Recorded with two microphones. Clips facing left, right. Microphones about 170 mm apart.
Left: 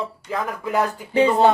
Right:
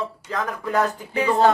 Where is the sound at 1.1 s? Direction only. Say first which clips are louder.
Left 4 dB; 25° left (ahead or behind).